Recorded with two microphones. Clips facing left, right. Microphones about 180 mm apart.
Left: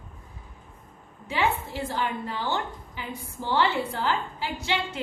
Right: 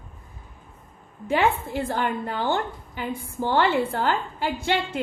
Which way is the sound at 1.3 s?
55° right (ahead or behind).